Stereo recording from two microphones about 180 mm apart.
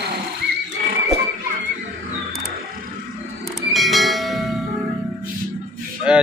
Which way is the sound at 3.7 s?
Centre (ahead or behind).